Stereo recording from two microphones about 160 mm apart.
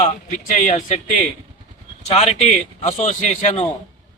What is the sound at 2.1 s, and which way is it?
A man's voice, 40° left (ahead or behind).